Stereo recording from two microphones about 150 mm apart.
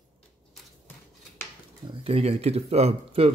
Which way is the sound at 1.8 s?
40° right (ahead or behind).